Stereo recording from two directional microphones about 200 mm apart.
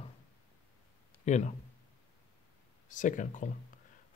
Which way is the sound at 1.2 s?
35° left (ahead or behind).